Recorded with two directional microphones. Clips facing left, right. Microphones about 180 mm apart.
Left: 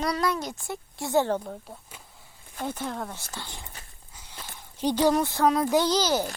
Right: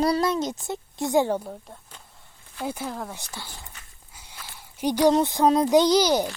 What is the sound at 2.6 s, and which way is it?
Speech, 5° right (ahead or behind).